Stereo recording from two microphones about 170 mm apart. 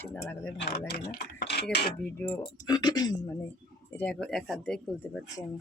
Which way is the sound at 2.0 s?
15° left (ahead or behind).